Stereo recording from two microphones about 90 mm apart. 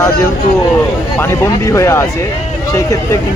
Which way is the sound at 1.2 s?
30° left (ahead or behind).